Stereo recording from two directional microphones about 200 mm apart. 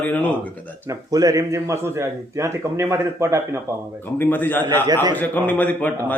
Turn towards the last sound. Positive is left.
turn(degrees=10)  # may be behind; listen again after turning